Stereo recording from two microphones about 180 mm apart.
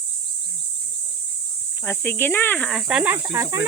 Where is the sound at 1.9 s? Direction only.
10° left (ahead or behind); by 3.7 s 15° right (ahead or behind).